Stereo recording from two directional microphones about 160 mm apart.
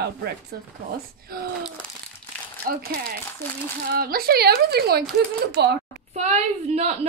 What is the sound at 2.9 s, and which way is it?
Speech, 70° right (ahead or behind).